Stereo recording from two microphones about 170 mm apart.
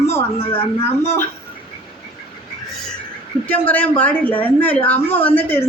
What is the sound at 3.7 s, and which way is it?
A woman's voice, 10° left (ahead or behind).